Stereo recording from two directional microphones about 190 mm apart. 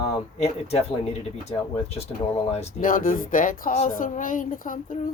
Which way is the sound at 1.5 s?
35° left (ahead or behind).